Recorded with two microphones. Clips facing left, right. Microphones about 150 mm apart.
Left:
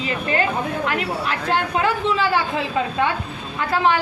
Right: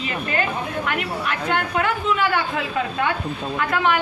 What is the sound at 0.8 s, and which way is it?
A man's voice, 30° left (ahead or behind).